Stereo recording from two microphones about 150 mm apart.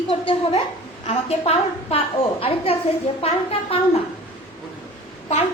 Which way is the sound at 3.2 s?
40° left (ahead or behind).